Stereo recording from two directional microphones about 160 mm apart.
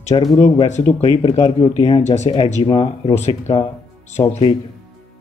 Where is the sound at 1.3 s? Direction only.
25° left (ahead or behind).